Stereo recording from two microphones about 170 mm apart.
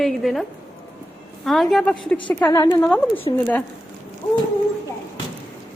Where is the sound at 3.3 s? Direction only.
30° left (ahead or behind).